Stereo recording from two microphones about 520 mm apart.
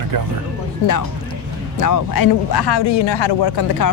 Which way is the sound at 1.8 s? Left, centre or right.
Left.